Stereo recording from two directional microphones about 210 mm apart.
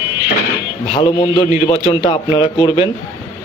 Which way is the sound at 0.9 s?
20° left (ahead or behind).